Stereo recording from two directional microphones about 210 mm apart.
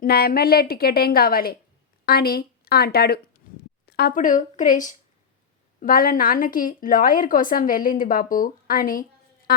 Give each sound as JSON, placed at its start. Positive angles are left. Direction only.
{"t": 0.0, "sound": "a woman's voice", "side_deg": 45}